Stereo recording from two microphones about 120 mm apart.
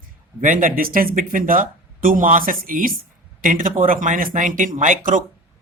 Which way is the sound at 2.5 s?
90° right.